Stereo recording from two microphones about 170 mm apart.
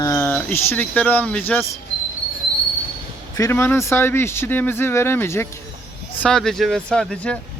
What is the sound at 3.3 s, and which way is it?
Speech, 15° left (ahead or behind).